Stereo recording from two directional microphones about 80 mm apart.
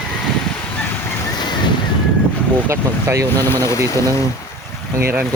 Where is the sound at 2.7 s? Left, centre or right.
Right.